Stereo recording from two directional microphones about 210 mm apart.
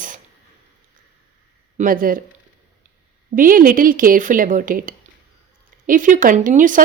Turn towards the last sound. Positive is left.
turn(degrees=-40)  # may be behind; listen again after turning